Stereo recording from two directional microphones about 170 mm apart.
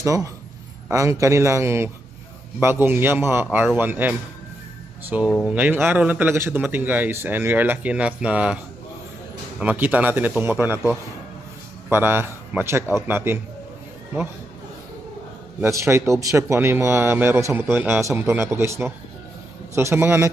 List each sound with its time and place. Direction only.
0.0 s a man's voice: 20° right (ahead or behind)
9.6 s speech: 10° right (ahead or behind)
11.9 s speech: 15° right (ahead or behind)
15.6 s speech: 15° right (ahead or behind)